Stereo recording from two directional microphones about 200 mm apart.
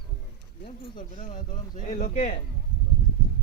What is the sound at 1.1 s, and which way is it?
Speech, 40° left (ahead or behind).